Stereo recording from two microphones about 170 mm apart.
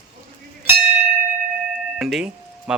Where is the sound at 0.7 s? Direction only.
10° right (ahead or behind).